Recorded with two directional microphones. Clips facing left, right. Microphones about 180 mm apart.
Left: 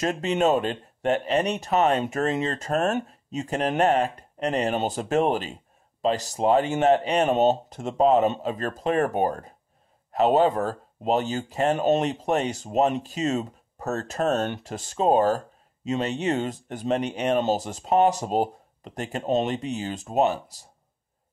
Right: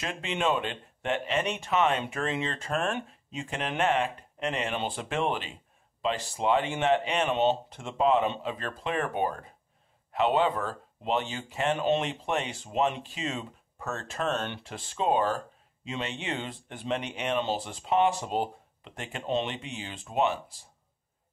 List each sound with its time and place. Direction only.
0.0 s speech: 40° left (ahead or behind)